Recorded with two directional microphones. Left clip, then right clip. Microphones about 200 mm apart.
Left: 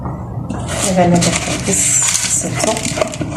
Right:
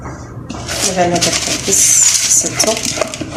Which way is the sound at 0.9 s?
25° right (ahead or behind).